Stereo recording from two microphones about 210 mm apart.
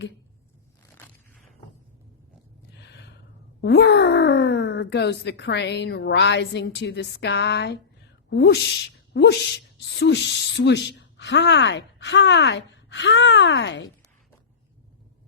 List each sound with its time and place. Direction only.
3.6 s speech: 50° left (ahead or behind)